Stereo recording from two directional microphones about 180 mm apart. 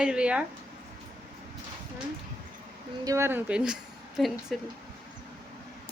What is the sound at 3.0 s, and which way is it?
A woman's voice, 15° right (ahead or behind).